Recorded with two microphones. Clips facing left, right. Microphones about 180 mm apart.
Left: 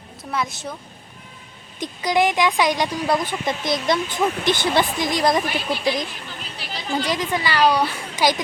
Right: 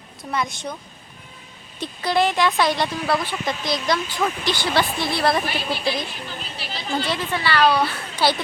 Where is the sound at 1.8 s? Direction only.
15° left (ahead or behind).